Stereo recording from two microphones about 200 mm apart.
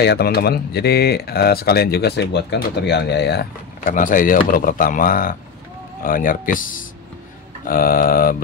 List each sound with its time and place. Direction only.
0.0 s speech: 55° left (ahead or behind)